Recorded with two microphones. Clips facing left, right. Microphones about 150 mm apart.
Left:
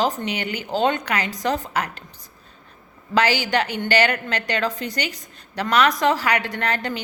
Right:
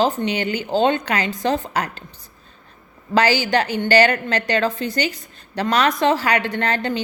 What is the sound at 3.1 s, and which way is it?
A woman's voice, 35° right (ahead or behind).